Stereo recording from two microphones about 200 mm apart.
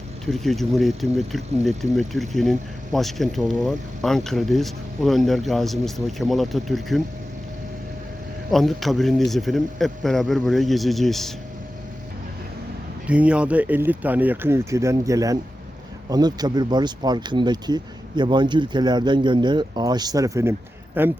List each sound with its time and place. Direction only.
0.3 s speech: centre (ahead or behind)
8.4 s speech: centre (ahead or behind)
13.1 s speech: 5° right (ahead or behind)